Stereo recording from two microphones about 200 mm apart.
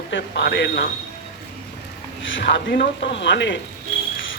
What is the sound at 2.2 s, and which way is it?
A man's voice, 65° left (ahead or behind).